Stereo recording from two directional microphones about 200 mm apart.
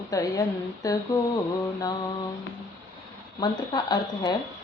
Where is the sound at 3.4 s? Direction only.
20° left (ahead or behind).